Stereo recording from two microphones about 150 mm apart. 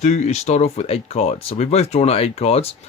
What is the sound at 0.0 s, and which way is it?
Speech, 50° left (ahead or behind).